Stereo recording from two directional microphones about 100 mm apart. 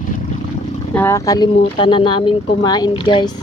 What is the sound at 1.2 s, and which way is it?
Speech, 40° left (ahead or behind).